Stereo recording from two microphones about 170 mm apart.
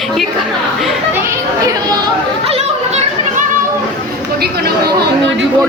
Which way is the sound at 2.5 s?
40° right (ahead or behind).